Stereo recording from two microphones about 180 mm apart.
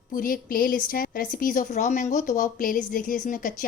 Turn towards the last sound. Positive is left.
turn(degrees=50)  # may be behind; listen again after turning